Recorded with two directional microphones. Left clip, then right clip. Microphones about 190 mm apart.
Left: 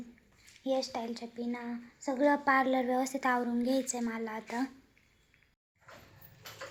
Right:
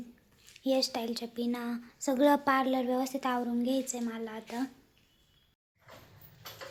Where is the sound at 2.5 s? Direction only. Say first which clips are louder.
Left 1 dB; 5° right (ahead or behind).